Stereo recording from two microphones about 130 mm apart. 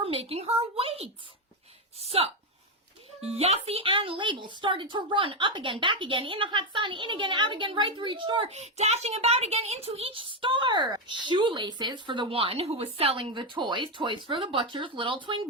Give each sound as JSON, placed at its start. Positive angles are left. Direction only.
{"t": 0.0, "sound": "a woman's voice", "side_deg": -45}
{"t": 2.0, "sound": "a sound", "side_deg": -50}
{"t": 3.2, "sound": "a woman's voice", "side_deg": -50}
{"t": 8.4, "sound": "a woman's voice", "side_deg": -55}